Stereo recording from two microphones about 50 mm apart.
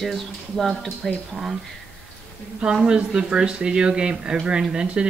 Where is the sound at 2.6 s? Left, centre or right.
Centre.